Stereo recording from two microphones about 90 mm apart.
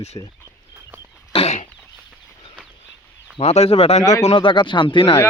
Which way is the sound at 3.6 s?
90° left.